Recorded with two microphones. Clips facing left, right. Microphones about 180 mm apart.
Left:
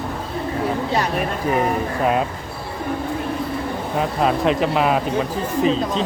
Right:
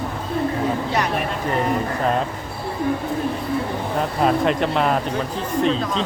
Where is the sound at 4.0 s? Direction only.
Centre (ahead or behind).